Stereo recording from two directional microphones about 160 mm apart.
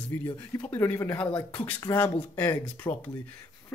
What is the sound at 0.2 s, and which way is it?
Speech, 10° left (ahead or behind).